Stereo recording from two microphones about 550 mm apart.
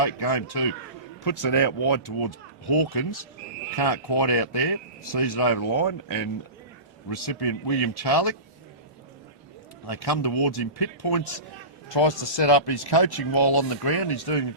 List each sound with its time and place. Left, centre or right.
0.0 s speech: left
7.3 s speech: left
9.9 s speech: left